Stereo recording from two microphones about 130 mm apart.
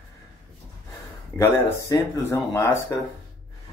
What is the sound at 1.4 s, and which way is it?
Speech, 20° left (ahead or behind).